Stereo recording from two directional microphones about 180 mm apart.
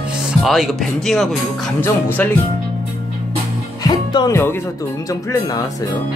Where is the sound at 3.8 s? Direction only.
20° left (ahead or behind).